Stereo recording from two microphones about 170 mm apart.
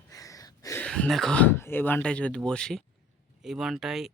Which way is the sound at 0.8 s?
5° left (ahead or behind).